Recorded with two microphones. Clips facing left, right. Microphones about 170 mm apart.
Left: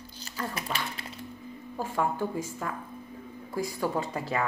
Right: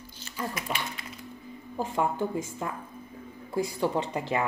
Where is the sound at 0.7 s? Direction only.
5° right (ahead or behind).